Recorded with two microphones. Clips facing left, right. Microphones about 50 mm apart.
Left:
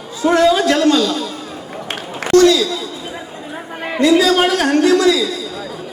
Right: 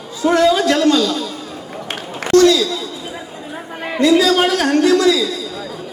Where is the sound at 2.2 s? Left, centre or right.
Centre.